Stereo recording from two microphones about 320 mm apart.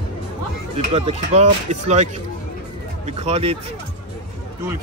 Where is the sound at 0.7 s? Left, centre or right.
Centre.